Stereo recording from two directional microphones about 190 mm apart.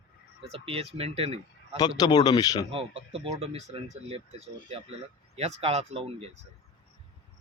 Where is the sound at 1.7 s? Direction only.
20° left (ahead or behind).